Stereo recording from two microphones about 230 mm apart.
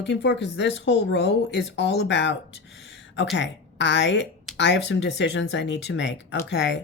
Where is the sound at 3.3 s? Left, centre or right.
Left.